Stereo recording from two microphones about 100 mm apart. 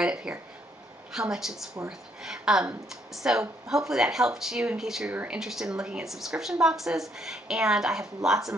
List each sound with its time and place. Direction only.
0.0 s speech: 10° right (ahead or behind)
5.1 s speech: 20° right (ahead or behind)
5.4 s speech: 5° right (ahead or behind)